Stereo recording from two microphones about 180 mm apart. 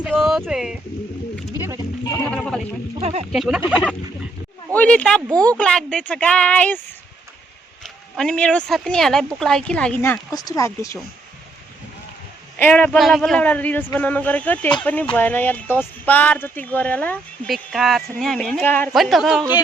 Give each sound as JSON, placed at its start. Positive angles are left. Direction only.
{"t": 0.0, "sound": "a sound", "side_deg": 0}
{"t": 0.4, "sound": "speech", "side_deg": -5}
{"t": 1.5, "sound": "a sound", "side_deg": -15}
{"t": 2.3, "sound": "speech", "side_deg": 5}
{"t": 3.0, "sound": "speech", "side_deg": -35}
{"t": 3.3, "sound": "speech", "side_deg": 0}
{"t": 4.7, "sound": "speech", "side_deg": 5}
{"t": 8.1, "sound": "speech", "side_deg": 5}
{"t": 12.5, "sound": "speech", "side_deg": 10}